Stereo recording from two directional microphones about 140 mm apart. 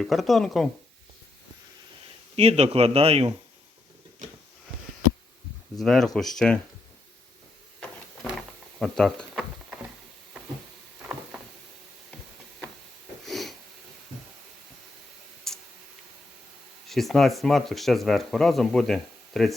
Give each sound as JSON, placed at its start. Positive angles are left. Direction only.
{"t": 0.0, "sound": "speech", "side_deg": 0}
{"t": 2.3, "sound": "a man's voice", "side_deg": -45}
{"t": 5.8, "sound": "speech", "side_deg": 0}
{"t": 7.8, "sound": "a sound", "side_deg": 5}
{"t": 13.2, "sound": "sniff", "side_deg": 0}
{"t": 15.5, "sound": "tick", "side_deg": 5}
{"t": 16.9, "sound": "speech", "side_deg": 0}